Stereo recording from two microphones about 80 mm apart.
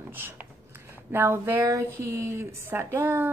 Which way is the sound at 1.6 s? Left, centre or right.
Right.